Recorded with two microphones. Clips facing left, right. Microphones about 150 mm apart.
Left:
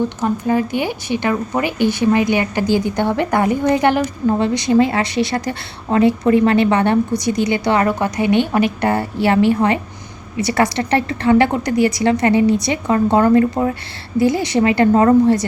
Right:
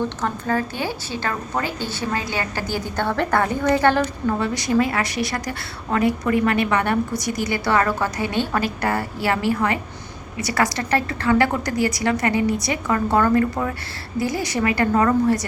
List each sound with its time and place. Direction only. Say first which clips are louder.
0.2 s a woman's voice: left 6 dB; 15° left (ahead or behind)